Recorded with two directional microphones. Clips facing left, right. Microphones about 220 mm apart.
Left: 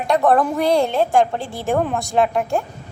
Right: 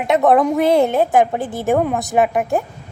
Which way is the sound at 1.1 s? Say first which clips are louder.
Right 2 dB; 5° right (ahead or behind).